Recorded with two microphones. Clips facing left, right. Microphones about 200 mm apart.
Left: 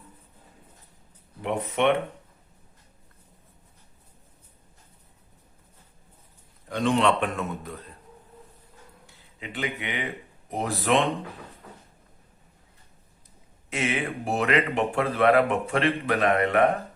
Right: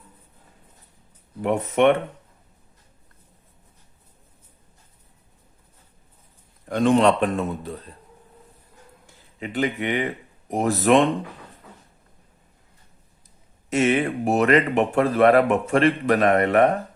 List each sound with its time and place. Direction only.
1.4 s speech: 45° right (ahead or behind)
6.7 s a man's voice: 50° right (ahead or behind); by 7.8 s 30° right (ahead or behind)
9.4 s speech: 40° right (ahead or behind)
13.7 s speech: 40° right (ahead or behind)